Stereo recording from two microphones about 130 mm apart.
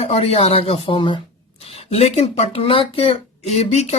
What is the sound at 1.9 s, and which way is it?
Speech, 55° left (ahead or behind).